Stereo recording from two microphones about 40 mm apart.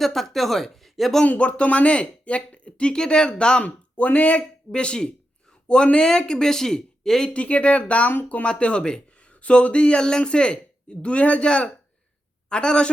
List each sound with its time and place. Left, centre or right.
0.0 s speech: centre
1.2 s speech: left
3.6 s speech: left
4.7 s speech: left
7.3 s speech: left